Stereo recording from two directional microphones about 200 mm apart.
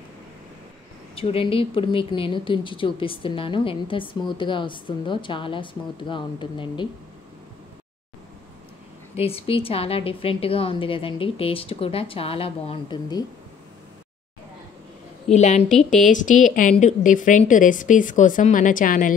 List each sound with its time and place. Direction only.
1.1 s a woman's voice: 30° left (ahead or behind)
9.1 s a woman's voice: 30° left (ahead or behind)
15.3 s a woman's voice: 35° left (ahead or behind)